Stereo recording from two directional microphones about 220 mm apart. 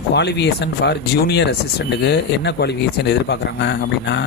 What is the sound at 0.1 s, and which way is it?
Speech, 50° left (ahead or behind).